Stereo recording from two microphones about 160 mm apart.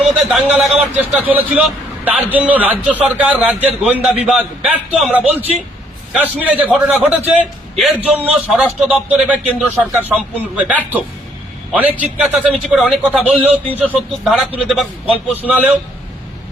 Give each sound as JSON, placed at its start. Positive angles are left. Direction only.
{"t": 0.2, "sound": "a man's voice", "side_deg": -5}
{"t": 5.2, "sound": "a man's voice", "side_deg": -40}
{"t": 6.1, "sound": "a man's voice", "side_deg": -10}